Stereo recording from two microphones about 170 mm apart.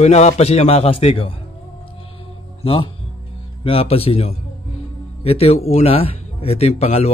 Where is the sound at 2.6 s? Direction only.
35° left (ahead or behind).